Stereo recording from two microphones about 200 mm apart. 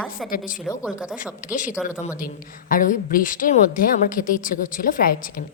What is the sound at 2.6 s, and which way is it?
A woman's voice, 40° left (ahead or behind).